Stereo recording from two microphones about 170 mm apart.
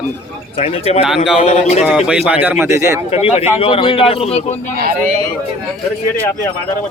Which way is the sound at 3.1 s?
35° left (ahead or behind).